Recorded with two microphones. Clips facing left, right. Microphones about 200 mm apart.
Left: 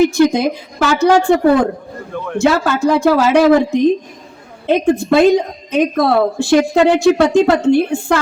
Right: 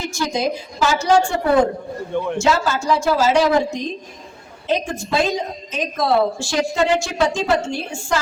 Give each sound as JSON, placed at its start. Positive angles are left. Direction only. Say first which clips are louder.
{"t": 0.0, "sound": "a woman's voice", "louder": "left 11 dB", "side_deg": 60}
{"t": 2.4, "sound": "a woman's voice", "louder": "left 9 dB", "side_deg": 60}